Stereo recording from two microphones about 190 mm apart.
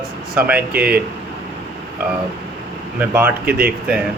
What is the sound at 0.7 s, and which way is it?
Speech, 50° right (ahead or behind).